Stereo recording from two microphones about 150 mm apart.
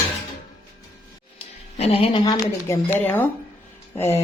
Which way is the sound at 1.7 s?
45° left (ahead or behind).